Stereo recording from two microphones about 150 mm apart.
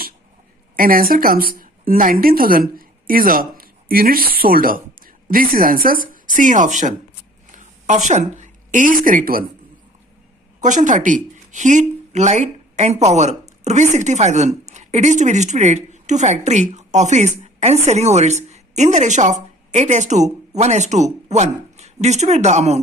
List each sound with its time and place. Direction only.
0.8 s a woman's voice: 70° right (ahead or behind)
10.6 s a woman's voice: 55° right (ahead or behind)